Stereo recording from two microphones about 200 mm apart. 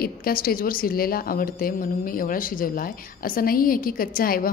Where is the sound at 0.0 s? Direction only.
45° left (ahead or behind).